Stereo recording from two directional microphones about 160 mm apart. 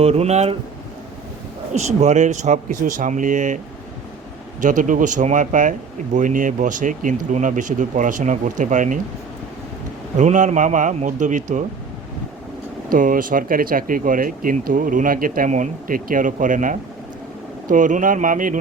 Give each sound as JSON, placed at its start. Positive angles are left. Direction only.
{"t": 0.0, "sound": "speech", "side_deg": -40}
{"t": 1.7, "sound": "speech", "side_deg": -45}
{"t": 4.6, "sound": "speech", "side_deg": -55}
{"t": 10.2, "sound": "speech", "side_deg": -50}
{"t": 12.9, "sound": "speech", "side_deg": -60}